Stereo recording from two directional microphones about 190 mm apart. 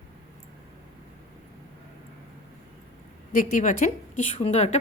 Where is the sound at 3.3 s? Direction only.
45° left (ahead or behind).